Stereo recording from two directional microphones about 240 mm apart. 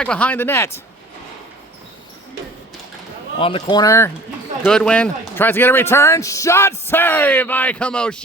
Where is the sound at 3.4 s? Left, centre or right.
Left; by 8.1 s centre.